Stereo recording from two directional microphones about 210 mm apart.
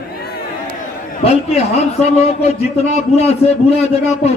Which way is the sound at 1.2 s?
30° left (ahead or behind).